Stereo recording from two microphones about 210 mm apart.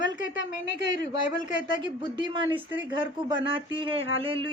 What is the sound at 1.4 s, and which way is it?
Speech, 20° right (ahead or behind).